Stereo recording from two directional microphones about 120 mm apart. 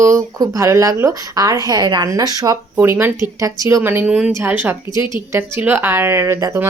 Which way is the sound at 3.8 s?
15° right (ahead or behind).